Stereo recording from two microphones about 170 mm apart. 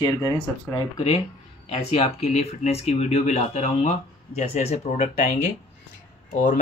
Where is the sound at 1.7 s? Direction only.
35° left (ahead or behind).